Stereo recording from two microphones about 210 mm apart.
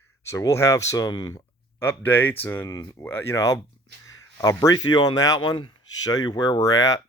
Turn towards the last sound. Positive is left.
turn(degrees=15)  # may be behind; listen again after turning